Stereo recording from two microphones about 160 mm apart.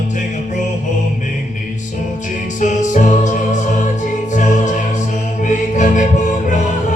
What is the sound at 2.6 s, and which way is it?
Music, 50° left (ahead or behind).